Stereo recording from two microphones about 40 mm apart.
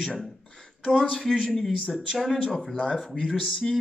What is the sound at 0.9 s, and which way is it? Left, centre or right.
Speech, centre.